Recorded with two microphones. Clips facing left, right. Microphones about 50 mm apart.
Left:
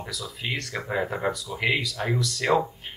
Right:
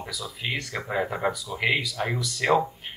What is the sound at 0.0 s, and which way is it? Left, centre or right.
Speech, centre.